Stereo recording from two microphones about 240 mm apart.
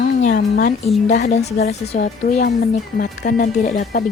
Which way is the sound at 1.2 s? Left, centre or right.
Left.